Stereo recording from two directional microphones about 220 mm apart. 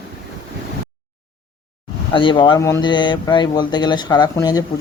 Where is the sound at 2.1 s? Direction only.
25° left (ahead or behind).